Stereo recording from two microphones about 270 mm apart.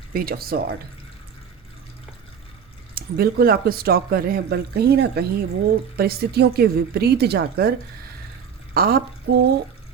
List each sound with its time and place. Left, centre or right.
0.1 s speech: right
2.9 s speech: right
8.7 s speech: right